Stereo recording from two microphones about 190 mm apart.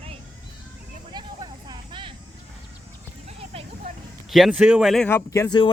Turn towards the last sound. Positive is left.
turn(degrees=20)  # may be behind; listen again after turning